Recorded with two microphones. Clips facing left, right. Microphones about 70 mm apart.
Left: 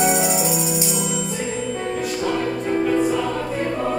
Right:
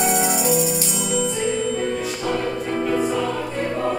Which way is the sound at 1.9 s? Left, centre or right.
Centre.